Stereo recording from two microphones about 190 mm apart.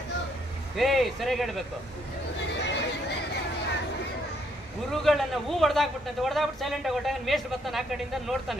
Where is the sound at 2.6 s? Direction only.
65° left (ahead or behind).